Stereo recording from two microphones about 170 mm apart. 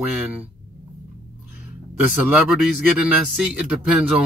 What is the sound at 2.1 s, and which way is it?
Speech, 5° right (ahead or behind).